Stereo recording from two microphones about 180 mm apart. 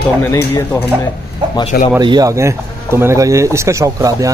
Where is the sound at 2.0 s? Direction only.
20° right (ahead or behind).